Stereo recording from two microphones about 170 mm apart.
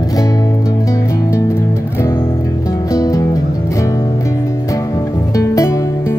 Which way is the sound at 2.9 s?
20° left (ahead or behind).